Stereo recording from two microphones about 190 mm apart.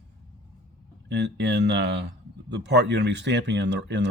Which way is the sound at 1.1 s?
65° right (ahead or behind).